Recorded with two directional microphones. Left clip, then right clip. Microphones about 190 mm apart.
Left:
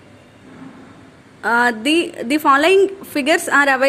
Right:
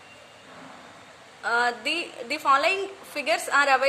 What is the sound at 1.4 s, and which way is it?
A woman's voice, 40° left (ahead or behind).